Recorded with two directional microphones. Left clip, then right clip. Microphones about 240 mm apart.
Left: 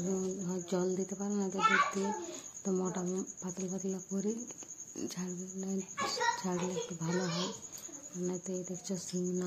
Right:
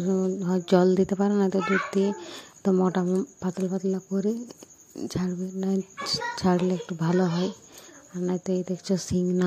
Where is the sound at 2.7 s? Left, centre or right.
Right.